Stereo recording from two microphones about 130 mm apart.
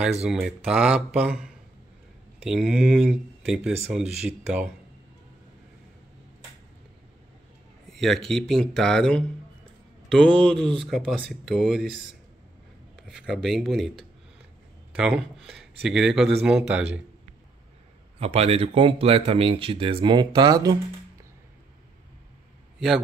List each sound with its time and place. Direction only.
0.2 s speech: 5° right (ahead or behind)
7.9 s speech: centre (ahead or behind)
13.0 s speech: centre (ahead or behind)
18.2 s speech: 50° right (ahead or behind); by 20.7 s 30° right (ahead or behind)